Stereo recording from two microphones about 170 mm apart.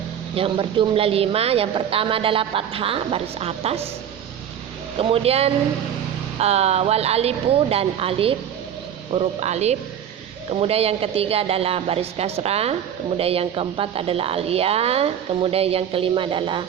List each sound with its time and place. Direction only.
0.3 s a woman's voice: 30° right (ahead or behind)
4.9 s a woman's voice: 35° right (ahead or behind)